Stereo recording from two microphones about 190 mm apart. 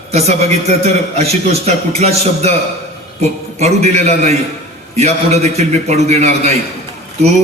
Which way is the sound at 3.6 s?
35° right (ahead or behind).